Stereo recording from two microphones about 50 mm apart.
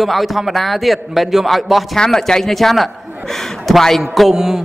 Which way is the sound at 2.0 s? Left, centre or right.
Centre.